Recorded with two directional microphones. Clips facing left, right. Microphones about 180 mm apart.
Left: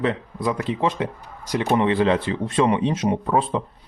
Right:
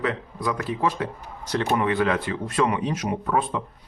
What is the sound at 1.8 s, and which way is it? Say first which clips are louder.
Speech: left 4 dB; 25° left (ahead or behind).